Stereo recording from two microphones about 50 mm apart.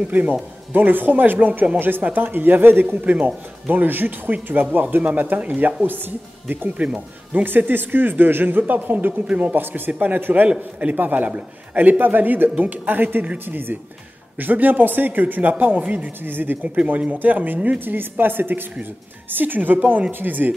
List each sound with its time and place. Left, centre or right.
0.1 s speech: right
3.1 s speech: right
6.8 s speech: right
7.4 s speech: right
10.5 s speech: right
16.6 s speech: right